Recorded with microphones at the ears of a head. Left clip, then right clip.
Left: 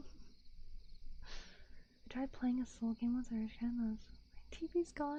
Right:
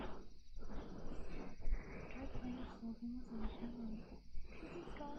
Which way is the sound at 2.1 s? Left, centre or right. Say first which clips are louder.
Left 13 dB; left.